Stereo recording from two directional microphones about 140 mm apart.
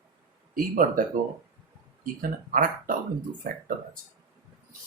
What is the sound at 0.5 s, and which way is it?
Speech, 75° right (ahead or behind).